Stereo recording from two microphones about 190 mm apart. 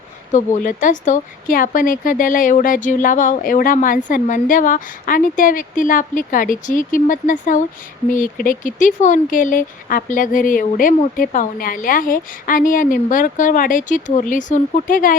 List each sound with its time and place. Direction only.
0.3 s speech: 40° left (ahead or behind)